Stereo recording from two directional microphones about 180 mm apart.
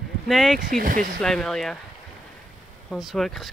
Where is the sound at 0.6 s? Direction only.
50° right (ahead or behind).